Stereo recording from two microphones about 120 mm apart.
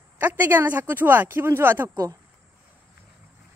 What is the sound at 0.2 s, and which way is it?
Speech, 15° right (ahead or behind).